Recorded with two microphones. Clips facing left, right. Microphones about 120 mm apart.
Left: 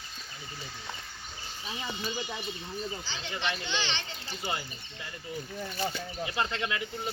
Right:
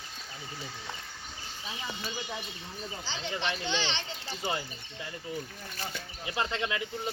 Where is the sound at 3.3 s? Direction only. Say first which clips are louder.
Even; 35° right (ahead or behind).